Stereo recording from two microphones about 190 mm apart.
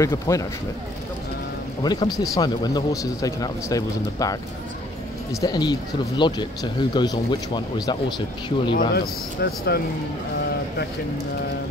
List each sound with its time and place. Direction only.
0.0 s a man's voice: 15° left (ahead or behind)
1.8 s speech: 20° left (ahead or behind)
8.7 s speech: 55° left (ahead or behind)